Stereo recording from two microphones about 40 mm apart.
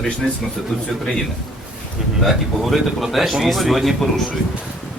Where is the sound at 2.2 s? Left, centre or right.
Centre.